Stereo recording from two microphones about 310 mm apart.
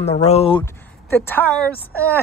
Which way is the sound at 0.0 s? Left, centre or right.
Left.